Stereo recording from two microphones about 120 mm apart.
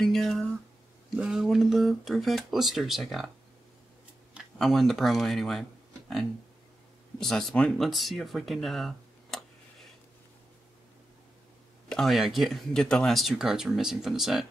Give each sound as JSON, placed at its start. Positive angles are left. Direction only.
{"t": 0.0, "sound": "a sound", "side_deg": 5}
{"t": 1.1, "sound": "speech", "side_deg": -5}
{"t": 4.6, "sound": "speech", "side_deg": 0}
{"t": 11.9, "sound": "speech", "side_deg": 0}